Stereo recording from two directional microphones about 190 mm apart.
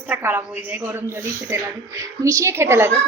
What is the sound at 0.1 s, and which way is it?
A woman's voice, 10° right (ahead or behind).